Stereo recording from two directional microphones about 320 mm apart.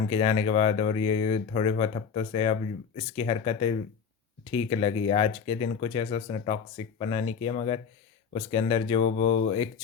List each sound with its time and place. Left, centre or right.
0.1 s speech: centre